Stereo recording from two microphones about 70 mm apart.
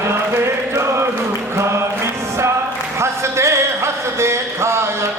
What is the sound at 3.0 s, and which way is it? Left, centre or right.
Music, right.